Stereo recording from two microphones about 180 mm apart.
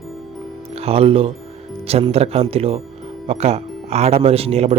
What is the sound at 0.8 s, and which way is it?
A man's voice, 35° right (ahead or behind).